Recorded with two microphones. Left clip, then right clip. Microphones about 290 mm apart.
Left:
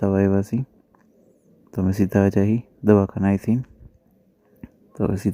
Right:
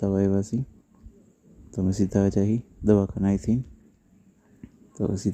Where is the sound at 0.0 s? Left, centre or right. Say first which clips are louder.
Left 4 dB; left.